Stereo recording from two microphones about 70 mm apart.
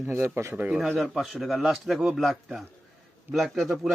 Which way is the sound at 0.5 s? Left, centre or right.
Right.